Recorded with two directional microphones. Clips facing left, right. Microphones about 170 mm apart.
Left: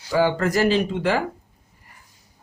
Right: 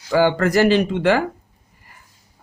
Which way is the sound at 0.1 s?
75° right (ahead or behind).